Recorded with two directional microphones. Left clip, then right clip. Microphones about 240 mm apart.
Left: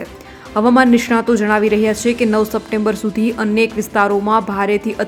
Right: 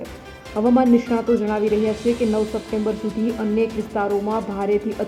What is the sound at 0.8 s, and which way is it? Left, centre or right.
Speech, centre.